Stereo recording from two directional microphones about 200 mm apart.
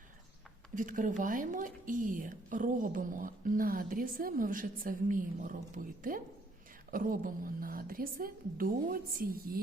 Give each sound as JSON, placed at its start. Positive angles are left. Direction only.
{"t": 0.8, "sound": "speech", "side_deg": -40}